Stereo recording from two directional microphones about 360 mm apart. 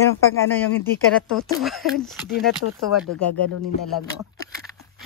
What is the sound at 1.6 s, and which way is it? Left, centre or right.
Speech, centre.